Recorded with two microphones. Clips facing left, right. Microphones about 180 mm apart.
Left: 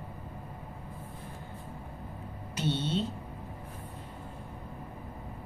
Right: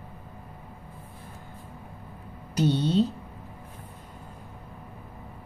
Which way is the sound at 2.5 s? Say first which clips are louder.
Right 8 dB; 40° right (ahead or behind).